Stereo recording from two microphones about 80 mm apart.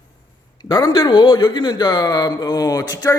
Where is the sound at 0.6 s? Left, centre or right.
Left.